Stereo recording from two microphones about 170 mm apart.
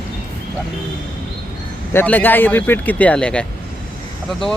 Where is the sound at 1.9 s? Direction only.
10° left (ahead or behind).